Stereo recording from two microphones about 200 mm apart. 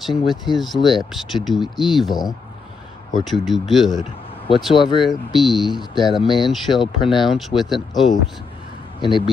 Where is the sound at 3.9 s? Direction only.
25° left (ahead or behind).